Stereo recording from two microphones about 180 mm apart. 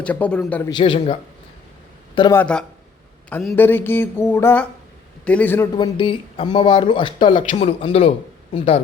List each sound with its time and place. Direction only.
0.0 s speech: 5° left (ahead or behind)
0.7 s a man's voice: 30° left (ahead or behind)
2.3 s speech: 5° left (ahead or behind)
5.7 s speech: 25° left (ahead or behind)
7.3 s a man's voice: 35° left (ahead or behind)